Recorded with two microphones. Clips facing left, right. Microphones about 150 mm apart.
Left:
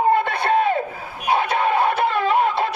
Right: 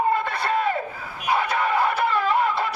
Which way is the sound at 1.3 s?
65° left (ahead or behind).